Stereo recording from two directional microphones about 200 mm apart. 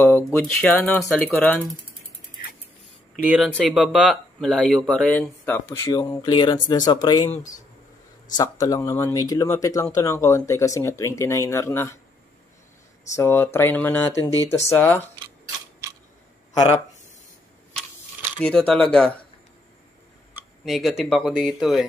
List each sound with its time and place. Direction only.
0.0 s speech: 5° left (ahead or behind)
3.2 s speech: 5° right (ahead or behind)
5.7 s speech: 20° left (ahead or behind)
8.4 s speech: 20° left (ahead or behind)
13.1 s speech: 10° left (ahead or behind)
18.4 s speech: 5° left (ahead or behind)
20.6 s speech: centre (ahead or behind)